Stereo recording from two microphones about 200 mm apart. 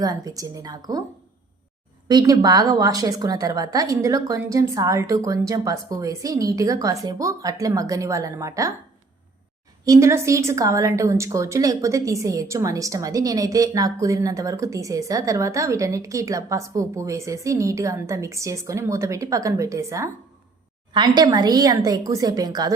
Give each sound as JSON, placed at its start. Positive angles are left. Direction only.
{"t": 0.0, "sound": "a woman's voice", "side_deg": -20}
{"t": 2.0, "sound": "a woman's voice", "side_deg": -20}
{"t": 9.8, "sound": "a woman's voice", "side_deg": -15}
{"t": 21.2, "sound": "a woman's voice", "side_deg": -20}